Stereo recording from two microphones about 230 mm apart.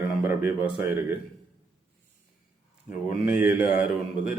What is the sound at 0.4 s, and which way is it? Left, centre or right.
Speech, centre.